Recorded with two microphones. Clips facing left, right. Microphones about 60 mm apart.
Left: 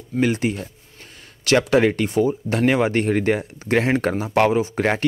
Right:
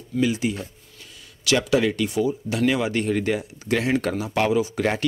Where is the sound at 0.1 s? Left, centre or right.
Left.